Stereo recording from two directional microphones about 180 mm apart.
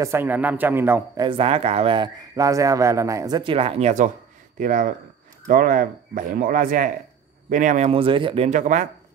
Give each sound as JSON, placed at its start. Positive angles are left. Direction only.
{"t": 0.0, "sound": "speech", "side_deg": -15}
{"t": 1.2, "sound": "speech", "side_deg": -30}
{"t": 8.5, "sound": "speech", "side_deg": -45}